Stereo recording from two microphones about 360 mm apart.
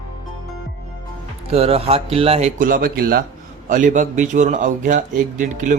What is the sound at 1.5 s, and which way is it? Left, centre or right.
A man's voice, centre.